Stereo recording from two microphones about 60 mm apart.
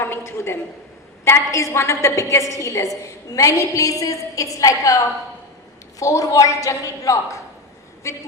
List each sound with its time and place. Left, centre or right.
0.0 s a sound: left
1.5 s a woman's voice: left
2.9 s a woman's voice: left